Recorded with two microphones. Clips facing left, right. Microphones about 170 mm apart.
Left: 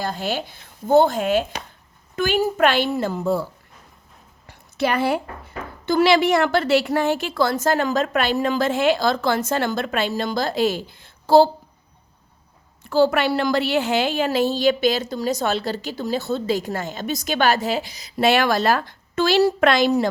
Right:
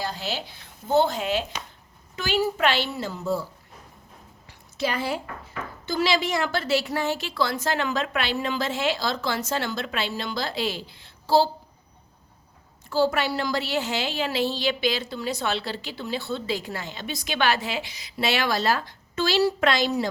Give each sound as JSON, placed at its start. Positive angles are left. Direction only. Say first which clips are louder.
{"t": 0.0, "sound": "a woman's voice", "louder": "left 5 dB", "side_deg": 50}
{"t": 4.4, "sound": "a sound", "louder": "left 6 dB", "side_deg": 60}
{"t": 5.8, "sound": "a woman's voice", "louder": "left 8 dB", "side_deg": 60}
{"t": 12.8, "sound": "a woman's voice", "louder": "left 5 dB", "side_deg": 60}